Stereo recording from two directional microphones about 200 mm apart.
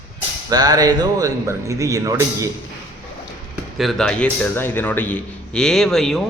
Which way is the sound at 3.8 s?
Centre (ahead or behind).